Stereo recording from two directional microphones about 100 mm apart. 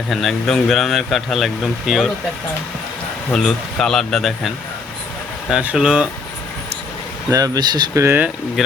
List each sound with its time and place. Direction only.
0.1 s speech: centre (ahead or behind)
3.3 s speech: 5° left (ahead or behind)
7.3 s speech: 40° right (ahead or behind)
7.9 s speech: 25° right (ahead or behind)
8.6 s speech: 5° right (ahead or behind)